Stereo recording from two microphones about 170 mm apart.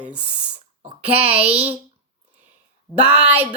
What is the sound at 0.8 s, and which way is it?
Speech, 35° right (ahead or behind).